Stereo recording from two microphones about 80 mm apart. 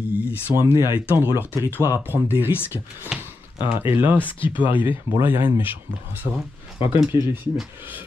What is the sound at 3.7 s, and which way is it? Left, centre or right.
Speech, right.